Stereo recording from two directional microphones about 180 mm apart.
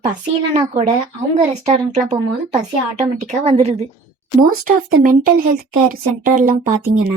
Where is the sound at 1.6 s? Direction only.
40° right (ahead or behind).